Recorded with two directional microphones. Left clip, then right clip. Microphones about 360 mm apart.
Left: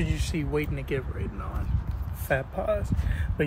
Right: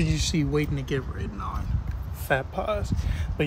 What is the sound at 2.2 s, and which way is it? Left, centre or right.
Speech, centre.